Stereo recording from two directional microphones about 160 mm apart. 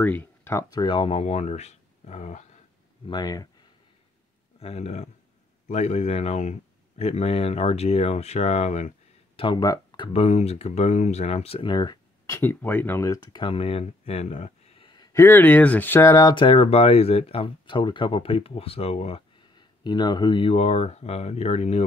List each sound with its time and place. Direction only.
0.0 s speech: 10° left (ahead or behind); by 2.4 s 45° left (ahead or behind)
3.1 s speech: 25° left (ahead or behind)
4.6 s speech: 40° left (ahead or behind)
9.4 s speech: 25° left (ahead or behind)
12.3 s speech: 15° left (ahead or behind); by 15.0 s 30° left (ahead or behind)
15.1 s speech: 15° left (ahead or behind); by 21.8 s 40° left (ahead or behind)